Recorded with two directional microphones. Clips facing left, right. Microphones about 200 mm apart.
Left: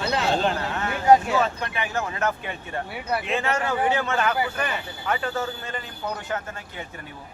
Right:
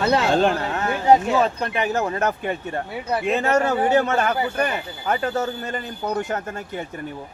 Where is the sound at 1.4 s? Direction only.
35° right (ahead or behind).